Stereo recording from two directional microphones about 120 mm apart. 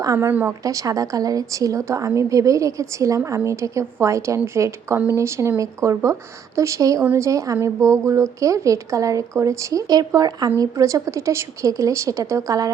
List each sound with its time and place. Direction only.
0.0 s a woman's voice: 30° right (ahead or behind)
0.3 s a woman's voice: 15° right (ahead or behind)
0.6 s speech: 30° right (ahead or behind)